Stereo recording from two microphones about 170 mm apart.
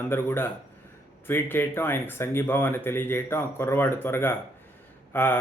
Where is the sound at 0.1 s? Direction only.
10° left (ahead or behind).